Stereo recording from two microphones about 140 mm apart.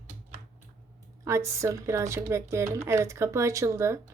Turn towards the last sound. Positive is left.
turn(degrees=-20)  # may be behind; listen again after turning